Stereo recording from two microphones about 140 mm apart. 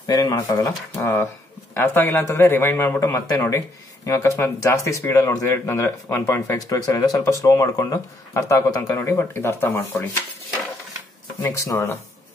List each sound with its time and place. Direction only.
0.0 s speech: 25° left (ahead or behind)
0.7 s speech: 15° left (ahead or behind)
11.4 s speech: 20° left (ahead or behind)